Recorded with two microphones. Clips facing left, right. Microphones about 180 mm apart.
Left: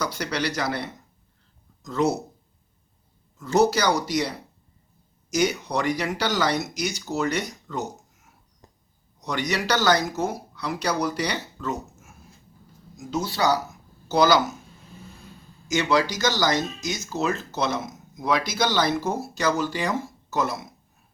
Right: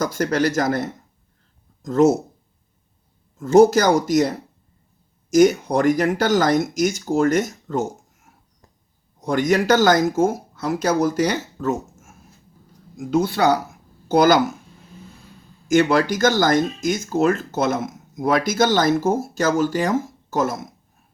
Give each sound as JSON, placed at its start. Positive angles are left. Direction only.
{"t": 0.0, "sound": "speech", "side_deg": -50}
{"t": 3.3, "sound": "speech", "side_deg": -50}
{"t": 15.6, "sound": "speech", "side_deg": -50}